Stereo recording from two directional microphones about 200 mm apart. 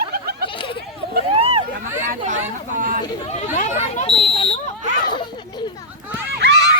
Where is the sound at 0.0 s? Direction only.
50° right (ahead or behind).